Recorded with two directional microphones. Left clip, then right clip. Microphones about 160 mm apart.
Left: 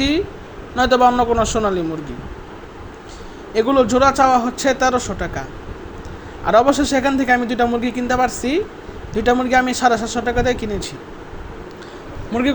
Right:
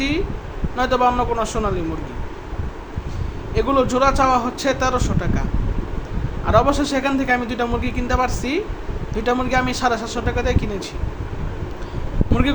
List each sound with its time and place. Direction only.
0.8 s a man's voice: 30° left (ahead or behind)
3.5 s a man's voice: 25° left (ahead or behind)
12.3 s a man's voice: 15° left (ahead or behind)